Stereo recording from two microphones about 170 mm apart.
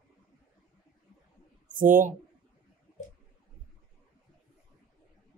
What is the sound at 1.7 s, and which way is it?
Speech, 50° right (ahead or behind).